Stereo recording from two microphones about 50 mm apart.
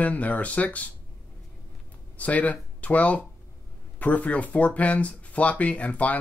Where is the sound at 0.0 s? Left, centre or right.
Left.